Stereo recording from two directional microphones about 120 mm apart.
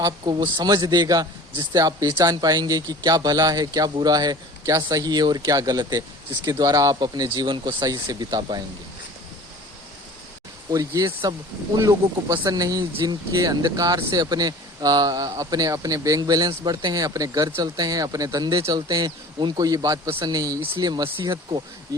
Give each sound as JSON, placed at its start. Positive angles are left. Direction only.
{"t": 0.0, "sound": "a man's voice", "side_deg": -35}
{"t": 10.7, "sound": "a man's voice", "side_deg": -30}